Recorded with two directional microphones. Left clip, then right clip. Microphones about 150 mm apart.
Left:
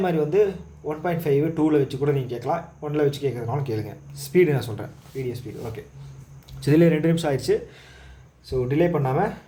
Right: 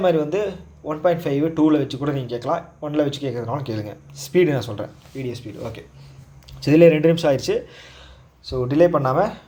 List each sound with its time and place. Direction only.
0.0 s speech: 35° right (ahead or behind)
5.1 s speech: 40° right (ahead or behind)
6.6 s speech: 25° right (ahead or behind)
8.4 s speech: 40° right (ahead or behind)